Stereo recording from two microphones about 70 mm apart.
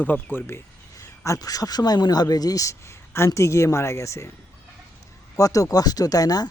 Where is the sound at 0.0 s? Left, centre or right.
Left.